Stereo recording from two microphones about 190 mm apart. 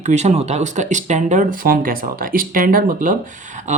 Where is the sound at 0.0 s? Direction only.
35° right (ahead or behind).